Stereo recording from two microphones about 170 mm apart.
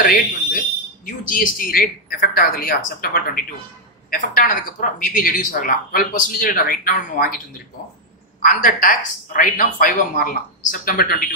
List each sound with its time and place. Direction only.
0.0 s speech: 55° left (ahead or behind)
8.4 s a woman's voice: 50° left (ahead or behind)